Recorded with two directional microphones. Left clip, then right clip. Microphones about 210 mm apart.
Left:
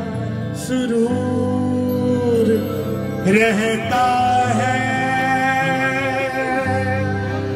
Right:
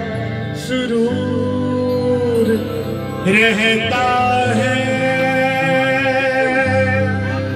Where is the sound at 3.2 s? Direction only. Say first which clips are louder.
Right 2 dB; 45° left (ahead or behind).